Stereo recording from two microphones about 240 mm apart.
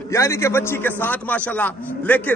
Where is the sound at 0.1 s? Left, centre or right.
Centre.